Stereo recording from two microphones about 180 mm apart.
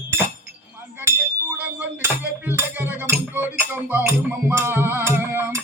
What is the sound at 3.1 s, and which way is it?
Music, 10° right (ahead or behind).